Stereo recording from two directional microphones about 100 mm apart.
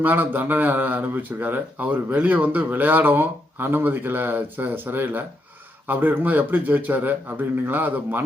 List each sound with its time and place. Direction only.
0.0 s a man's voice: 20° right (ahead or behind)